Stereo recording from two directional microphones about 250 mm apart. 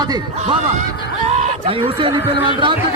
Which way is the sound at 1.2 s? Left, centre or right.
Right.